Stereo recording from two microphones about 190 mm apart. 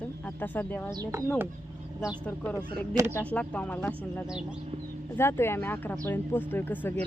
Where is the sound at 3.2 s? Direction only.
5° left (ahead or behind).